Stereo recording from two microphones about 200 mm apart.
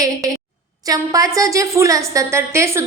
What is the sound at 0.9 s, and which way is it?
A woman's voice, 15° right (ahead or behind).